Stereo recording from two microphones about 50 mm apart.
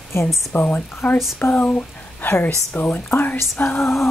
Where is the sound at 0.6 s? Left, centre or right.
Left.